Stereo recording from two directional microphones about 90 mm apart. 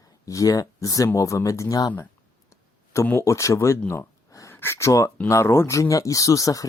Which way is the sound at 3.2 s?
35° left (ahead or behind).